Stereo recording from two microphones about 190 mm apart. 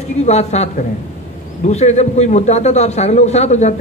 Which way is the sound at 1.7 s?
35° left (ahead or behind).